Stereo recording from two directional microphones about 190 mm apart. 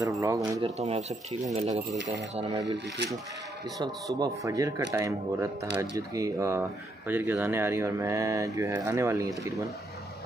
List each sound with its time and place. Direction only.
0.2 s a man's voice: 20° right (ahead or behind)
0.7 s speech: 35° right (ahead or behind)
3.8 s a man's voice: 20° right (ahead or behind)